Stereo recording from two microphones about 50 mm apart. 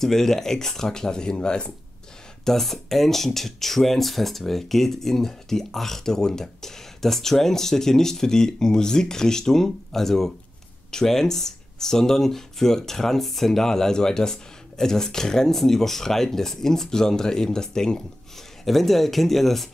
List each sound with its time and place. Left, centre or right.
0.0 s speech: centre
2.4 s speech: centre